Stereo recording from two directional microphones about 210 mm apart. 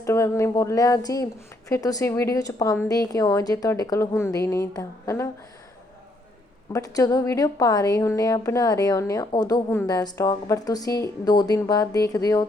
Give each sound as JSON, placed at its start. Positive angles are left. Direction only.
{"t": 0.0, "sound": "a woman's voice", "side_deg": 15}
{"t": 6.7, "sound": "a woman's voice", "side_deg": 15}